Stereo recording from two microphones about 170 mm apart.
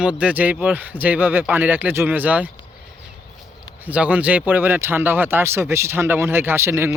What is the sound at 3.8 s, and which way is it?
Speech, 10° right (ahead or behind).